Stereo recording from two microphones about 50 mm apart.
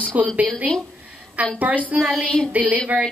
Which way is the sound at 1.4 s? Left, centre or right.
Right.